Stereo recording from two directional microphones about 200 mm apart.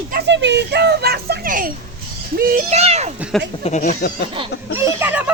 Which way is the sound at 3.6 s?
35° left (ahead or behind).